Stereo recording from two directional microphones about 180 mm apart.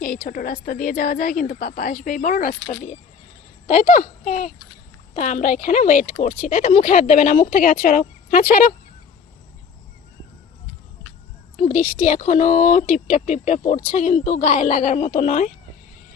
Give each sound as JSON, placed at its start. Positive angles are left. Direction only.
{"t": 0.0, "sound": "a woman's voice", "side_deg": 55}
{"t": 11.5, "sound": "a woman's voice", "side_deg": 45}